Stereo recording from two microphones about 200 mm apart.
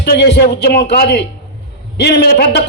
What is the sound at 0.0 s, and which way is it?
A man's voice, 55° left (ahead or behind).